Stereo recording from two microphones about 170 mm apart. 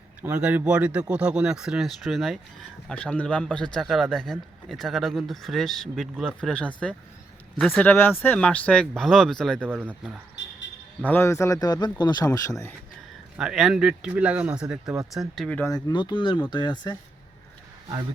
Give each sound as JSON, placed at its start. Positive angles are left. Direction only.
{"t": 0.2, "sound": "a man's voice", "side_deg": -5}
{"t": 9.6, "sound": "speech", "side_deg": -10}
{"t": 10.4, "sound": "a sound", "side_deg": 90}
{"t": 11.0, "sound": "a man's voice", "side_deg": 15}
{"t": 13.3, "sound": "a man's voice", "side_deg": -5}
{"t": 15.6, "sound": "a man's voice", "side_deg": 25}